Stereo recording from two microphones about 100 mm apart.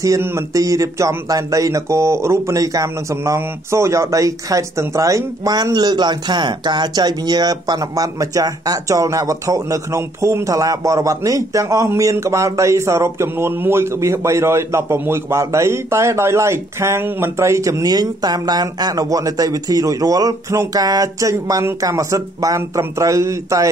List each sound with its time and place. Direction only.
0.0 s speech: 30° right (ahead or behind)